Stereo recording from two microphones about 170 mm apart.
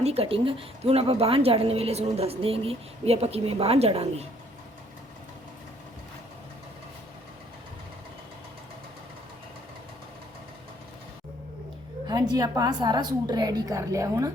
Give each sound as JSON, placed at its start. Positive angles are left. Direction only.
{"t": 0.0, "sound": "a woman's voice", "side_deg": -35}
{"t": 12.0, "sound": "a woman's voice", "side_deg": -25}